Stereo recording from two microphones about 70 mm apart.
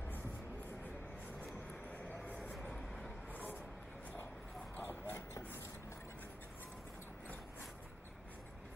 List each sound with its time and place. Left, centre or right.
2.2 s vehicle: left
2.6 s vehicle: centre
4.7 s basketball bounce: left
5.1 s a sound: left